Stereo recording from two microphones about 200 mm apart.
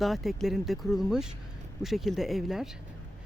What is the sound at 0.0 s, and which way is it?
Speech, centre (ahead or behind).